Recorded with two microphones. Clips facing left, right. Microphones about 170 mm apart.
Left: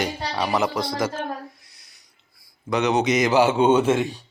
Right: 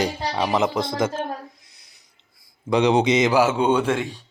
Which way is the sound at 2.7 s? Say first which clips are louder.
Right 3 dB; 30° right (ahead or behind).